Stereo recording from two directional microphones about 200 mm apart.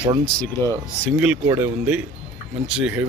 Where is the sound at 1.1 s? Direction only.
5° right (ahead or behind).